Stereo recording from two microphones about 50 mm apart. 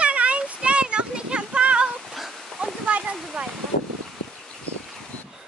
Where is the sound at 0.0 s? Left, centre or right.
Right.